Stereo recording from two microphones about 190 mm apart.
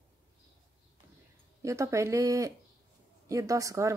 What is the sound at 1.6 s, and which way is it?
Speech, 15° right (ahead or behind).